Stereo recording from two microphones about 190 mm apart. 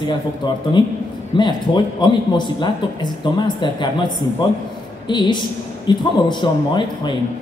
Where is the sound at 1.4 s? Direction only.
25° left (ahead or behind).